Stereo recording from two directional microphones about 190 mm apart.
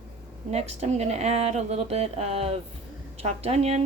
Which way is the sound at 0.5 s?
35° right (ahead or behind).